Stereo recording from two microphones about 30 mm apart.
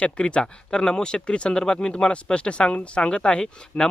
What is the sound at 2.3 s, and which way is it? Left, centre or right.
Speech, left.